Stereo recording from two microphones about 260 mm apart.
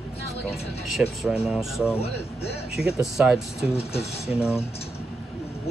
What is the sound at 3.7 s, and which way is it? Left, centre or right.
Speech, left.